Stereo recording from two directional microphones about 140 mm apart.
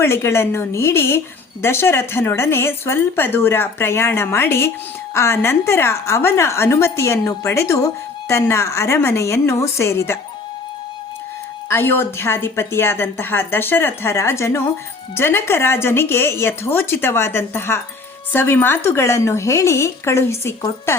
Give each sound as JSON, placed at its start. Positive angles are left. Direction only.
{"t": 0.0, "sound": "a woman's voice", "side_deg": 20}
{"t": 11.7, "sound": "a woman's voice", "side_deg": 15}